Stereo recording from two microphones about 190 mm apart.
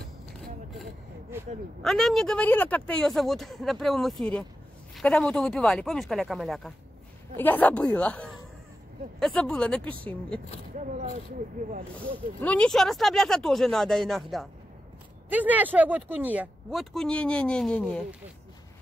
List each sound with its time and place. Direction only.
1.8 s a woman's voice: centre (ahead or behind)
10.8 s speech: 40° right (ahead or behind)
12.4 s speech: 5° left (ahead or behind)